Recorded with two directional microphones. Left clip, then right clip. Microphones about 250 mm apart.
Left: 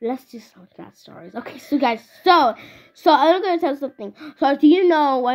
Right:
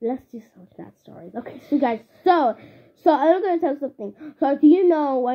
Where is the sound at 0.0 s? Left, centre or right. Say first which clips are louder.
Left 1 dB; centre.